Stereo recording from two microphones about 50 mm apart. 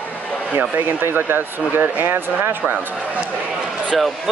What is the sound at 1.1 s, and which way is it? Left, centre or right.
Speech, right.